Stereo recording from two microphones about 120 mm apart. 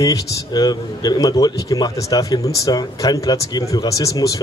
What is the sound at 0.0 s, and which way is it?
A man's voice, 30° left (ahead or behind).